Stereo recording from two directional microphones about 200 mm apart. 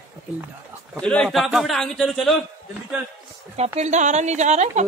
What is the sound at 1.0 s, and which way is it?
A man's voice, 5° left (ahead or behind).